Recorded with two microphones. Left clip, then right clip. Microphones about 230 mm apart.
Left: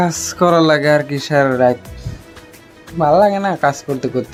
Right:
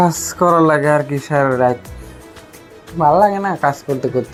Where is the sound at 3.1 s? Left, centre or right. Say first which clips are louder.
Left 4 dB; left.